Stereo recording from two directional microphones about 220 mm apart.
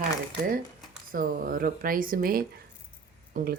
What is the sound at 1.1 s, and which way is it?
Speech, 40° right (ahead or behind).